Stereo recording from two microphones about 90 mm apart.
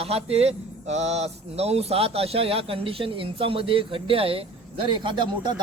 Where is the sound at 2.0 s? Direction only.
90° right.